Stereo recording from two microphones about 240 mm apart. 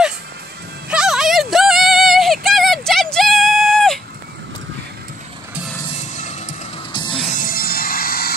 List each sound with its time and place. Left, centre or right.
0.8 s a sound: centre
6.1 s music: left
6.9 s music: centre; by 8.4 s left